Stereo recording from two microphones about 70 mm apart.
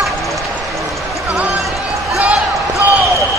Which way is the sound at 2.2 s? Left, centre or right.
Right.